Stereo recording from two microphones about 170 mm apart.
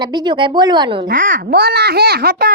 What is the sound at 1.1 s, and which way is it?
A child's voice, 50° right (ahead or behind).